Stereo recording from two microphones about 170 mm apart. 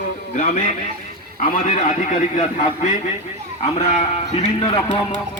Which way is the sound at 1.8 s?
45° left (ahead or behind).